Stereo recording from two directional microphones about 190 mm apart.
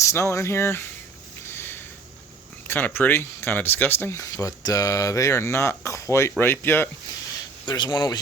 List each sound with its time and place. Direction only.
0.0 s speech: 15° left (ahead or behind)
1.5 s a sound: 10° left (ahead or behind)
2.6 s speech: 10° left (ahead or behind)
7.6 s speech: 25° left (ahead or behind)